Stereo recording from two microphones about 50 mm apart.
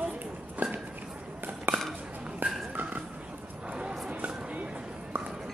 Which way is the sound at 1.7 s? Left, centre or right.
Right.